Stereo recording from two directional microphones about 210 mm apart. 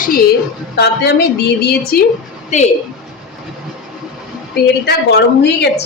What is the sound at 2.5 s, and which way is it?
Speech, 35° left (ahead or behind).